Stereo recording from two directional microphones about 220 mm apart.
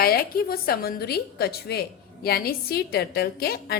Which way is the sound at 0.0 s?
45° left (ahead or behind).